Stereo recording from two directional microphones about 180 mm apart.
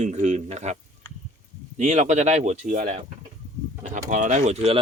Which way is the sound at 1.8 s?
40° right (ahead or behind).